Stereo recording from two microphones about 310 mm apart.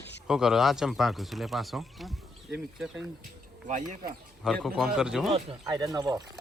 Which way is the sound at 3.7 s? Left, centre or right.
Right.